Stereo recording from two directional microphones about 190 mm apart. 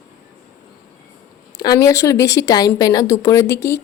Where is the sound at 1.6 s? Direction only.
20° left (ahead or behind).